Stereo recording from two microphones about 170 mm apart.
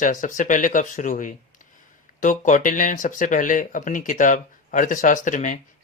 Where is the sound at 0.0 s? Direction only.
50° left (ahead or behind).